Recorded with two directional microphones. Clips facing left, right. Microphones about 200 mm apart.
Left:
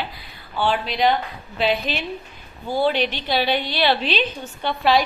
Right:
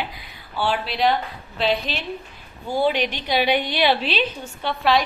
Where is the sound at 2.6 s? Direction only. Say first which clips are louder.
Left 1 dB; 15° right (ahead or behind).